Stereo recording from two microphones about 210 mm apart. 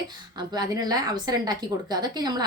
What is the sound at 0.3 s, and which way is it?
A woman's voice, 20° right (ahead or behind).